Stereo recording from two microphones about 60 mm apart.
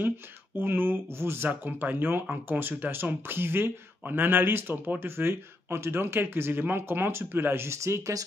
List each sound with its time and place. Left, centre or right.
0.6 s speech: right
1.5 s speech: right